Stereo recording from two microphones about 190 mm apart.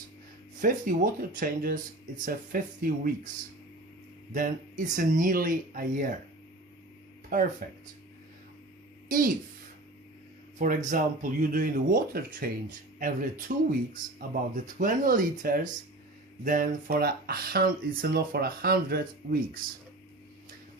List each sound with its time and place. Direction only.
0.6 s speech: 45° right (ahead or behind)
4.9 s speech: 45° right (ahead or behind)
7.3 s speech: 50° right (ahead or behind)
9.0 s a woman's voice: 45° right (ahead or behind)
10.8 s speech: 45° right (ahead or behind)